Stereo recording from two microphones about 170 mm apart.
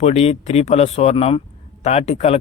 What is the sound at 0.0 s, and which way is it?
Speech, 40° left (ahead or behind).